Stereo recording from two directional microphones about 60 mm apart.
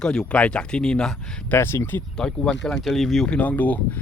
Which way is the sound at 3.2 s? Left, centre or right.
Left.